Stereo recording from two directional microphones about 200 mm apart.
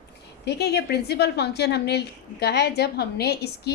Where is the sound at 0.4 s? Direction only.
55° left (ahead or behind).